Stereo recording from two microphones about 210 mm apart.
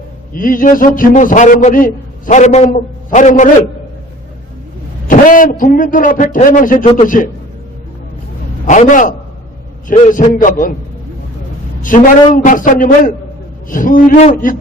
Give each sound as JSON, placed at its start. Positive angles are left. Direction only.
{"t": 0.3, "sound": "a man's voice", "side_deg": 40}
{"t": 5.0, "sound": "a man's voice", "side_deg": 40}
{"t": 8.6, "sound": "a man's voice", "side_deg": 35}
{"t": 11.8, "sound": "a man's voice", "side_deg": 40}